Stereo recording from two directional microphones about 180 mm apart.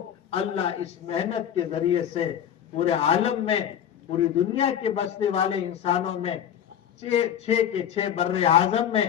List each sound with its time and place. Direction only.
0.3 s a man's voice: 35° left (ahead or behind)